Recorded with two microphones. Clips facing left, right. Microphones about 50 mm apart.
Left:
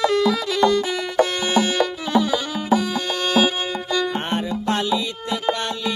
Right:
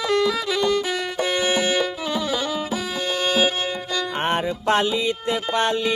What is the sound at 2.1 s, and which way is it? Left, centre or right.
Music, centre.